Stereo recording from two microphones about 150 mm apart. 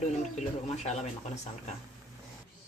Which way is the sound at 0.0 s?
50° left (ahead or behind).